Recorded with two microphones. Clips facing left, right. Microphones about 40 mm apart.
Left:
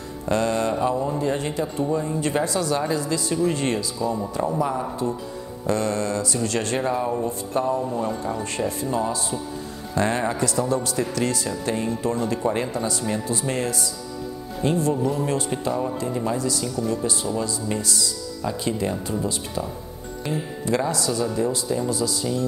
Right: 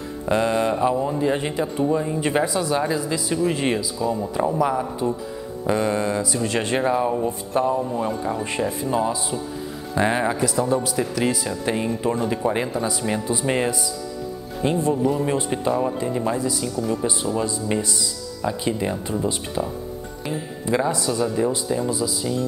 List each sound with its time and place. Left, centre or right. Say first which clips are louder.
0.2 s speech: right 2 dB; centre
5.7 s speech: right 2 dB; centre
13.0 s speech: right 2 dB; right